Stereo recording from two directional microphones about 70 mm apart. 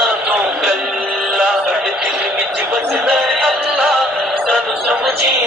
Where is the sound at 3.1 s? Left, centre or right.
Centre.